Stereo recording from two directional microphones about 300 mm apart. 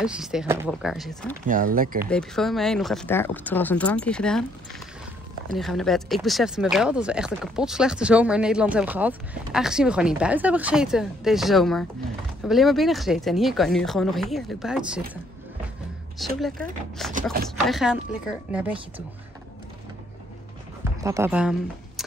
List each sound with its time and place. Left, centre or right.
0.0 s speech: centre
1.5 s speech: right
2.0 s speech: centre
16.3 s speech: centre
17.1 s speech: right
17.6 s speech: centre
21.0 s speech: centre